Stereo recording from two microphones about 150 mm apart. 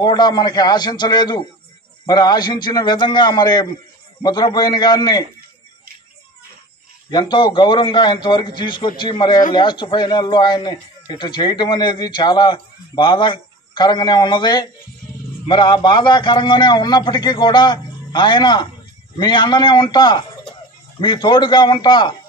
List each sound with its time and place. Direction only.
0.0 s speech: 30° left (ahead or behind)
7.1 s a man's voice: 30° left (ahead or behind)